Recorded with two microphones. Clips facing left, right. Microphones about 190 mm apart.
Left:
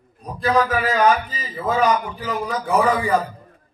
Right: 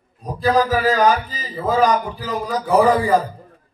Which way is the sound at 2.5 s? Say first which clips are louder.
Right 4 dB; 35° right (ahead or behind).